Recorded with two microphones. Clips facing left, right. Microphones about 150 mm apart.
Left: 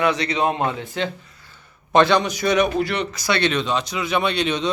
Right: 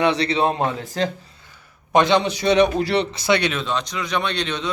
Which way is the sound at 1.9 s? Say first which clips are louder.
Left 1 dB; 15° right (ahead or behind).